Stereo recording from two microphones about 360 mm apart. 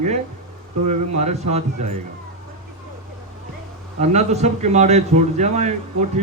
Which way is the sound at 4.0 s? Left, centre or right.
Centre.